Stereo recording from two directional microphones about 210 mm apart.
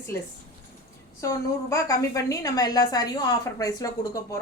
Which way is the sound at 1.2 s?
15° left (ahead or behind).